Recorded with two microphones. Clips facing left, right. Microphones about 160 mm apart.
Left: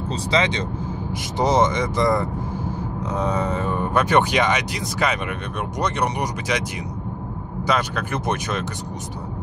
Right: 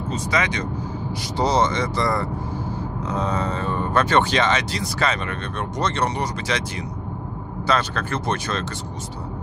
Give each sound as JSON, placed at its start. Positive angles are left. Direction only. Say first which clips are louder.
{"t": 0.1, "sound": "speech", "louder": "left 2 dB", "side_deg": 25}
{"t": 7.6, "sound": "speech", "louder": "even", "side_deg": 15}